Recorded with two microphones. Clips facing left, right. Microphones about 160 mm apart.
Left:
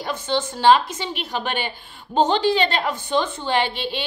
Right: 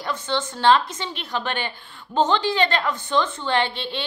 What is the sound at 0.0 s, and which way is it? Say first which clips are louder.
A woman's voice: left 2 dB; 15° left (ahead or behind).